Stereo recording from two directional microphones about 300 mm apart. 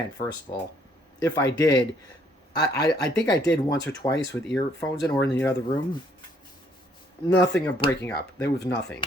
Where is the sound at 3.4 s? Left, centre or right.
Left.